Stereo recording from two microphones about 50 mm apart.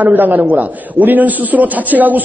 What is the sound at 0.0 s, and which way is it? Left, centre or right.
A man's voice, right.